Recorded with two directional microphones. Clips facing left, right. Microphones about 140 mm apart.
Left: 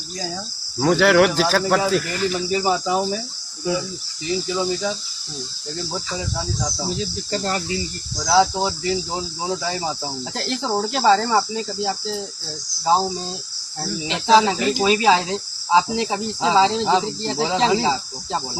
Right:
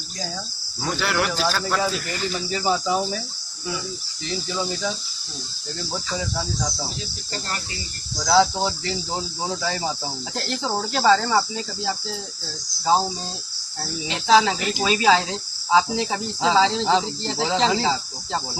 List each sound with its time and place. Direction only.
0.8 s speech: 80° left
2.5 s speech: 10° left (ahead or behind)
8.3 s speech: 10° left (ahead or behind)
10.8 s cricket: 20° left (ahead or behind)
14.3 s cricket: 25° left (ahead or behind)
16.8 s speech: 10° left (ahead or behind)